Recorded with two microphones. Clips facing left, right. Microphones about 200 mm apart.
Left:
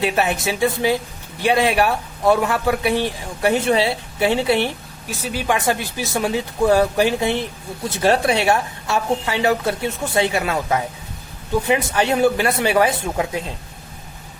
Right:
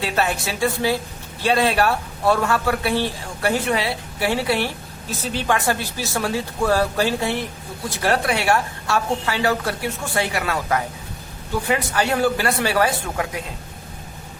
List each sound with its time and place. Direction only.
0.0 s a woman's voice: 20° left (ahead or behind)
5.0 s a man's voice: 10° left (ahead or behind)